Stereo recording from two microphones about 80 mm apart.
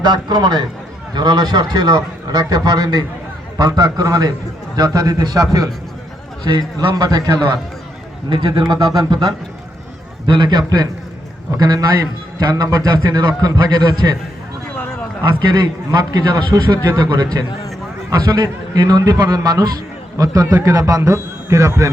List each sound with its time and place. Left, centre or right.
0.0 s a man's voice: right
8.7 s a man's voice: right
10.2 s a man's voice: right
15.2 s a man's voice: right
18.1 s a man's voice: right